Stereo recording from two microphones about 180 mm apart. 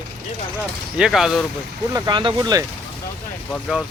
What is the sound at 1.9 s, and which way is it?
Speech, 25° right (ahead or behind).